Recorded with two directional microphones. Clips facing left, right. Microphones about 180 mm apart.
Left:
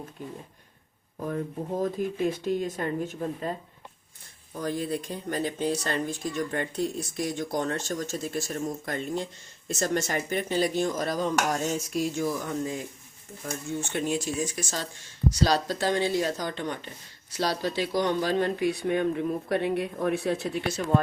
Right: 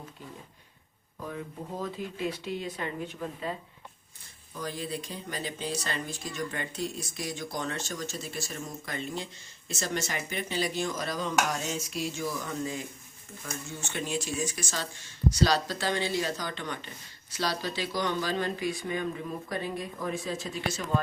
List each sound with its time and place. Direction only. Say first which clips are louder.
1.2 s speech: left 7 dB; 45° left (ahead or behind)
4.6 s speech: left 6 dB; 50° left (ahead or behind)
13.9 s speech: left 3 dB; 50° left (ahead or behind)